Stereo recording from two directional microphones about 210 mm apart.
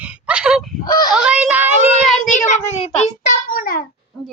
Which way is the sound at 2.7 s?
30° left (ahead or behind).